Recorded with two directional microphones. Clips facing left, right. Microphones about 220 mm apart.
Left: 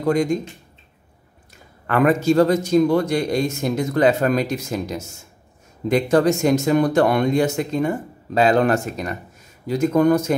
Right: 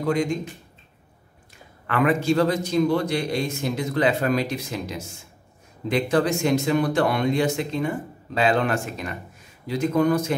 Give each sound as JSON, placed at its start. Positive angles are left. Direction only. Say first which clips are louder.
{"t": 0.0, "sound": "speech", "louder": "left 4 dB", "side_deg": 40}
{"t": 1.9, "sound": "speech", "louder": "left 4 dB", "side_deg": 45}